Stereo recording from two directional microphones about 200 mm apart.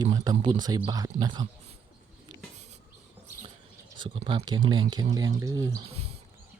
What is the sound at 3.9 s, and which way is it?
Speech, 25° right (ahead or behind).